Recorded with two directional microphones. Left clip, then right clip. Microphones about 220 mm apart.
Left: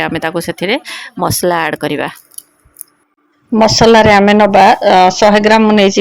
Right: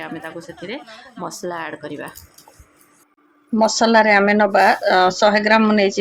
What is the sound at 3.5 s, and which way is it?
A woman's voice, 35° left (ahead or behind).